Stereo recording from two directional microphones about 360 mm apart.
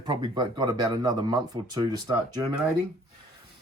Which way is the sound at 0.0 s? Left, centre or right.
Centre.